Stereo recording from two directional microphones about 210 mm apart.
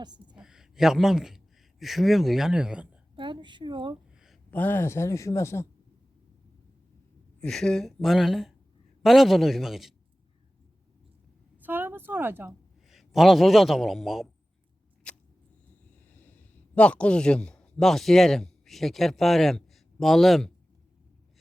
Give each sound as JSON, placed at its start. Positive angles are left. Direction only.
{"t": 0.0, "sound": "a woman's voice", "side_deg": -20}
{"t": 0.3, "sound": "a man's voice", "side_deg": 0}
{"t": 3.2, "sound": "speech", "side_deg": -20}
{"t": 4.1, "sound": "a sound", "side_deg": 0}
{"t": 4.5, "sound": "speech", "side_deg": 10}
{"t": 7.4, "sound": "speech", "side_deg": 0}
{"t": 11.5, "sound": "a woman's voice", "side_deg": -10}
{"t": 15.1, "sound": "a sound", "side_deg": 5}
{"t": 16.0, "sound": "speech", "side_deg": 10}